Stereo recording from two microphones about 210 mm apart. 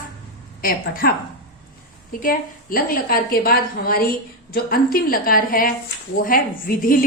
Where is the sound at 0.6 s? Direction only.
45° left (ahead or behind).